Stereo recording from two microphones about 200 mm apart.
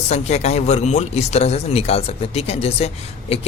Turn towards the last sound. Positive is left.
turn(degrees=30)  # may be behind; listen again after turning